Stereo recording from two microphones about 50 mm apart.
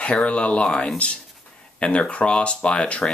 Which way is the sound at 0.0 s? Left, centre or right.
Left.